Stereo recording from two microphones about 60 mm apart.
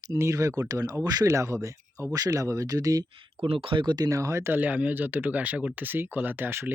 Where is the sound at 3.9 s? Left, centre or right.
Right.